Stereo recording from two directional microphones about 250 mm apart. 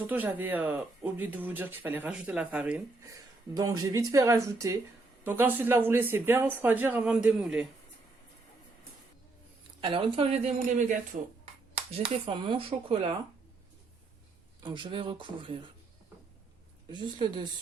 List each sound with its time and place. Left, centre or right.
0.1 s speech: centre
9.8 s speech: centre
12.0 s speech: centre
14.6 s speech: centre
16.9 s speech: centre